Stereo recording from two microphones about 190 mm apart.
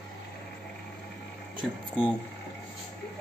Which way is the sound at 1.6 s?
Centre (ahead or behind).